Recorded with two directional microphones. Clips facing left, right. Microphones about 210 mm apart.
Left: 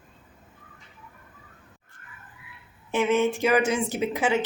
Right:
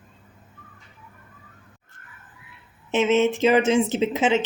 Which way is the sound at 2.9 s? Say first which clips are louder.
Right 3 dB; 20° right (ahead or behind).